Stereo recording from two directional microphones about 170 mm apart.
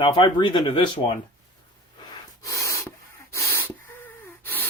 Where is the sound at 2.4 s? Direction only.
20° left (ahead or behind).